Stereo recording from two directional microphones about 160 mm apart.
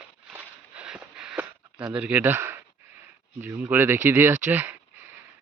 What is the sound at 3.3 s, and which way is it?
Speech, 10° right (ahead or behind).